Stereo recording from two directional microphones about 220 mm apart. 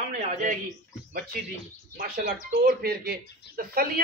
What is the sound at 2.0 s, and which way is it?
Speech, 45° right (ahead or behind).